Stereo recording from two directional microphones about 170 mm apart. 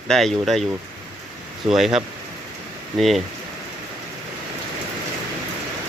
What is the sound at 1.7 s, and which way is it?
Speech, centre (ahead or behind).